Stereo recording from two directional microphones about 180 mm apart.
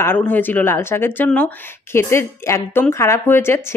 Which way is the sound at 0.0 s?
10° left (ahead or behind).